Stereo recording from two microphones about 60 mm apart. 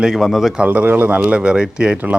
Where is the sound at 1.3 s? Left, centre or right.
Centre.